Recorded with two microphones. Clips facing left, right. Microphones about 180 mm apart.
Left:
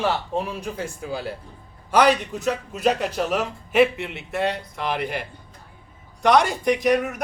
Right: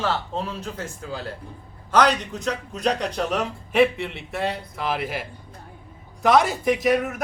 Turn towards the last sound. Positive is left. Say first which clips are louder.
# left 1 dB
turn(degrees=0)  # may be behind; listen again after turning